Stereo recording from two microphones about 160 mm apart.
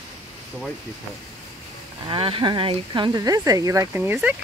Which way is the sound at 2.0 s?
35° right (ahead or behind).